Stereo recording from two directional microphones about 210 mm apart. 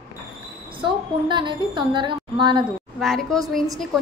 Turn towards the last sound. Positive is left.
turn(degrees=0)  # may be behind; listen again after turning